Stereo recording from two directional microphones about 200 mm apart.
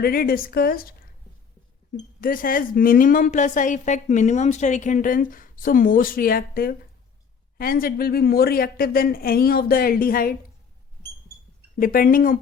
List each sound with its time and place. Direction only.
0.0 s a woman's voice: 50° left (ahead or behind)
2.2 s a woman's voice: 45° left (ahead or behind)
11.8 s a woman's voice: 45° left (ahead or behind)